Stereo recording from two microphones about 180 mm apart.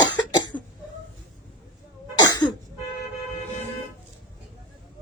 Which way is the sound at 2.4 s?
25° left (ahead or behind).